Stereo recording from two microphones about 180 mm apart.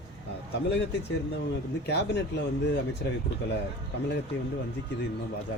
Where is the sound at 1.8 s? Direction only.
70° left (ahead or behind).